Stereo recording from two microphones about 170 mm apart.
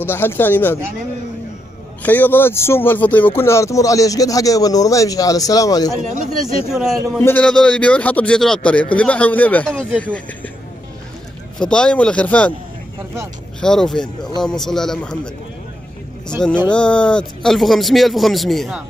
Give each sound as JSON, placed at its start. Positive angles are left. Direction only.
{"t": 0.0, "sound": "a man's voice", "side_deg": 15}
{"t": 2.0, "sound": "speech", "side_deg": 10}
{"t": 6.7, "sound": "speech", "side_deg": 0}
{"t": 7.2, "sound": "a man's voice", "side_deg": 10}
{"t": 11.6, "sound": "a man's voice", "side_deg": 5}
{"t": 13.6, "sound": "speech", "side_deg": 5}
{"t": 16.6, "sound": "speech", "side_deg": 5}